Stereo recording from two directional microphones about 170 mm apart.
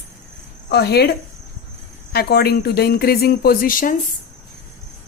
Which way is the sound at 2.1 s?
65° left (ahead or behind).